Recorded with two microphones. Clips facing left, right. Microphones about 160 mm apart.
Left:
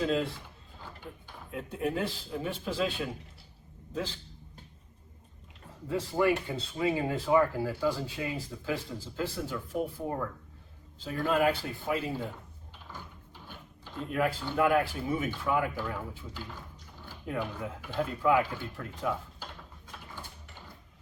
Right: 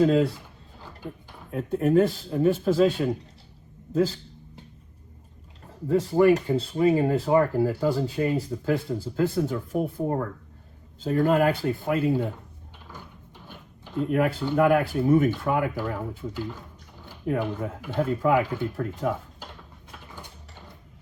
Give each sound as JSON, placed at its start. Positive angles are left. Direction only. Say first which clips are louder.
{"t": 0.0, "sound": "speech", "louder": "right 9 dB", "side_deg": -45}
{"t": 1.5, "sound": "speech", "louder": "right 9 dB", "side_deg": -45}
{"t": 3.9, "sound": "speech", "louder": "right 12 dB", "side_deg": -35}
{"t": 5.9, "sound": "speech", "louder": "right 8 dB", "side_deg": -35}
{"t": 14.5, "sound": "speech", "louder": "right 6 dB", "side_deg": -50}
{"t": 17.2, "sound": "speech", "louder": "right 8 dB", "side_deg": -45}